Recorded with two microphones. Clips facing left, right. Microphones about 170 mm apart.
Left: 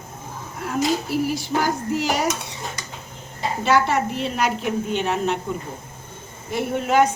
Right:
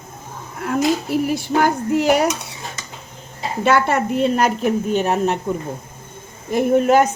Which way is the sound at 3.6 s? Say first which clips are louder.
Right 3 dB; 55° right (ahead or behind).